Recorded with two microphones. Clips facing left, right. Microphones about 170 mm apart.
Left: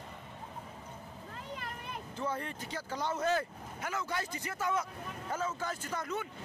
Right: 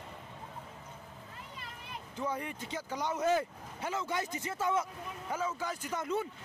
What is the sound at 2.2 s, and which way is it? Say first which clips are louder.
Speech: right 1 dB; 15° right (ahead or behind).